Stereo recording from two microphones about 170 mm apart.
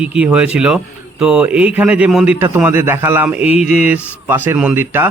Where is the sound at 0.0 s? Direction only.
5° right (ahead or behind).